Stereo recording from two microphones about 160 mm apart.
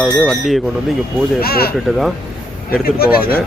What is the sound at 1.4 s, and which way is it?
Speech, 70° left (ahead or behind).